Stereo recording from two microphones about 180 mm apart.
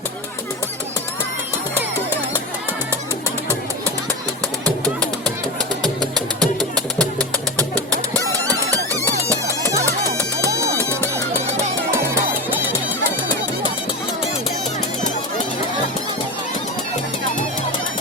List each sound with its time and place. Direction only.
5.8 s music: centre (ahead or behind)
8.7 s music: 20° right (ahead or behind)
12.5 s music: 10° right (ahead or behind)